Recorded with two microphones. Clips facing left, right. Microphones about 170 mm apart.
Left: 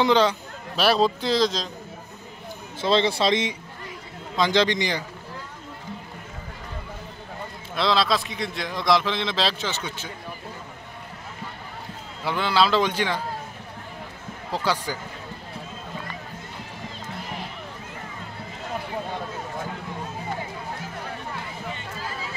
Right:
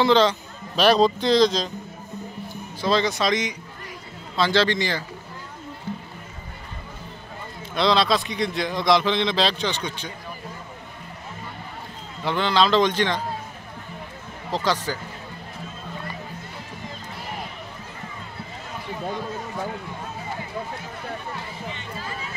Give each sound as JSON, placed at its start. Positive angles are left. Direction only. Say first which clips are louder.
{"t": 0.0, "sound": "speech", "louder": "right 2 dB", "side_deg": 10}
{"t": 2.8, "sound": "speech", "louder": "left 1 dB", "side_deg": 25}
{"t": 4.4, "sound": "speech", "louder": "even", "side_deg": 15}
{"t": 5.9, "sound": "run", "louder": "right 6 dB", "side_deg": 15}
{"t": 7.7, "sound": "a man's voice", "louder": "right 2 dB", "side_deg": 0}
{"t": 12.3, "sound": "speech", "louder": "right 1 dB", "side_deg": 10}
{"t": 14.5, "sound": "speech", "louder": "right 2 dB", "side_deg": 10}